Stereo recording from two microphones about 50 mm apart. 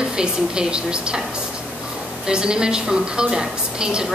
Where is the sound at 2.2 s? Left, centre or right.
Centre.